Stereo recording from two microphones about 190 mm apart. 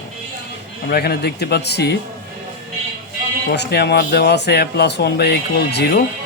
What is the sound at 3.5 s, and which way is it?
Speech, 60° left (ahead or behind).